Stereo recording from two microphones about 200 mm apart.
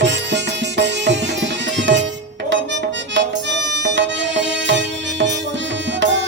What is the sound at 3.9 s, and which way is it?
Music, 65° right (ahead or behind).